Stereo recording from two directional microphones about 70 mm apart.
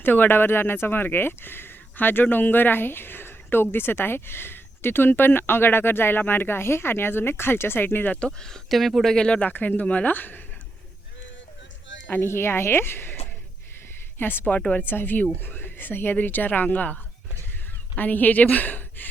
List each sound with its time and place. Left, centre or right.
0.0 s speech: left
8.3 s speech: centre
9.5 s speech: left
12.0 s speech: left
14.2 s speech: left